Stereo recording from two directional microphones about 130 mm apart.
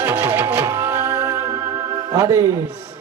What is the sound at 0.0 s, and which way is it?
Music, 15° right (ahead or behind).